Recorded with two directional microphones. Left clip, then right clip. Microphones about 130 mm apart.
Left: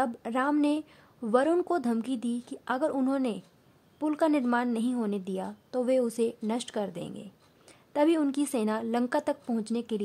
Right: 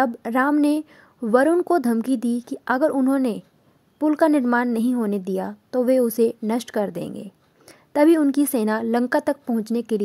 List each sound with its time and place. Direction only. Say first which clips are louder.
0.0 s speech: right 8 dB; 40° right (ahead or behind)